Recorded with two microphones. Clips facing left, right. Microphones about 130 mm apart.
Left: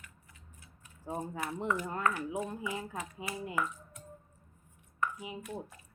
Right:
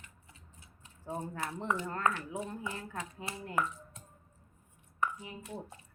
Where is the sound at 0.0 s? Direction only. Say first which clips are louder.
Even; 25° right (ahead or behind).